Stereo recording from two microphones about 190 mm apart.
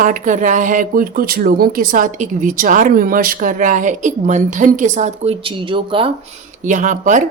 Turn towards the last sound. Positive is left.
turn(degrees=-40)  # may be behind; listen again after turning